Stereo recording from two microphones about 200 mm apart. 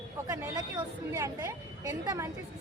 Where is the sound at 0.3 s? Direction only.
20° right (ahead or behind).